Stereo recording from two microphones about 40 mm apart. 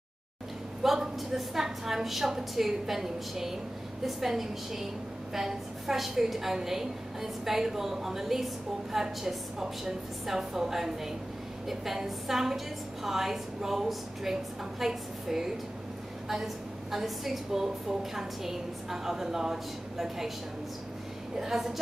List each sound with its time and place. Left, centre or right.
0.8 s a woman's voice: centre
16.9 s a woman's voice: centre
21.4 s a woman's voice: centre